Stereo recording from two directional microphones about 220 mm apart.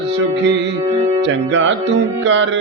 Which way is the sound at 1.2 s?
60° right (ahead or behind).